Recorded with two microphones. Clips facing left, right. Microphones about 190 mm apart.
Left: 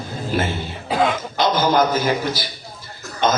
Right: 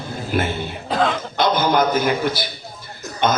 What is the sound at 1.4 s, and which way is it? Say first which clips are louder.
A man's voice: even; 55° right (ahead or behind).